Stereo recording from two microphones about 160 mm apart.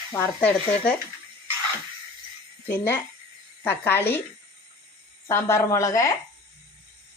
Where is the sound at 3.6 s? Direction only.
15° left (ahead or behind).